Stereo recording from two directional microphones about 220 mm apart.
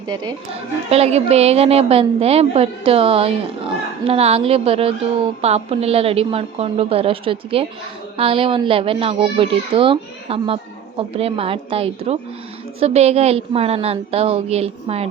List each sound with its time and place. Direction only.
0.9 s speech: 30° right (ahead or behind)